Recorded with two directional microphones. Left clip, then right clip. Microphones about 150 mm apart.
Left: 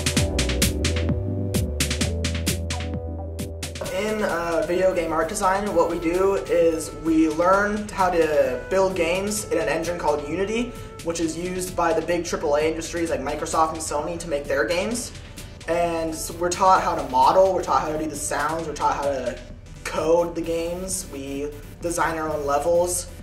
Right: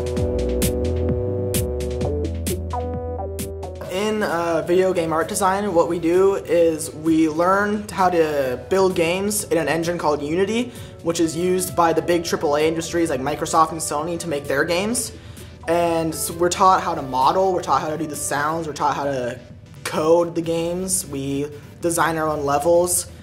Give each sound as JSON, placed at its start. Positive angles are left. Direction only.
{"t": 3.9, "sound": "speech", "side_deg": -20}